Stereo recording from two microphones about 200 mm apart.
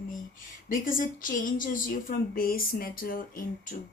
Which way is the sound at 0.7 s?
45° left (ahead or behind).